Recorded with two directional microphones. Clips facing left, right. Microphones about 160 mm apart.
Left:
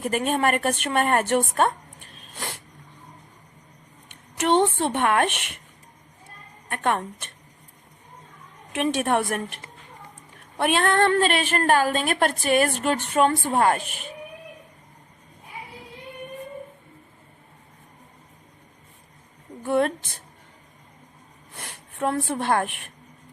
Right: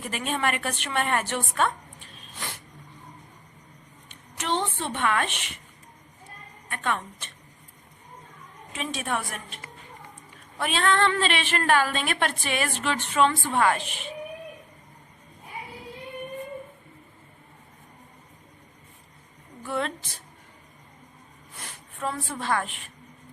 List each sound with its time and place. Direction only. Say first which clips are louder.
0.0 s a woman's voice: left 6 dB; 50° left (ahead or behind)
1.5 s a sound: left 4 dB; 50° left (ahead or behind)
4.1 s speech: left 8 dB; 55° left (ahead or behind)
6.7 s a woman's voice: left 5 dB; 55° left (ahead or behind)
8.7 s a woman's voice: left 8 dB; 65° left (ahead or behind)
10.6 s a woman's voice: left 3 dB; 55° left (ahead or behind)
19.6 s a woman's voice: left 8 dB; 55° left (ahead or behind)
21.5 s speech: left 3 dB; 65° left (ahead or behind)